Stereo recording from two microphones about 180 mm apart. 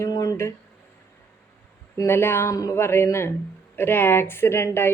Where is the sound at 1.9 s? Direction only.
15° left (ahead or behind).